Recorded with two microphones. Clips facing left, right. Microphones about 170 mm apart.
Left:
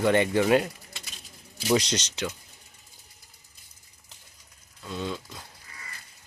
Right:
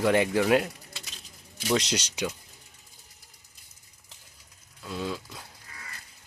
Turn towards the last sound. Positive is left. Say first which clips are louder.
# even
turn(degrees=-5)  # may be behind; listen again after turning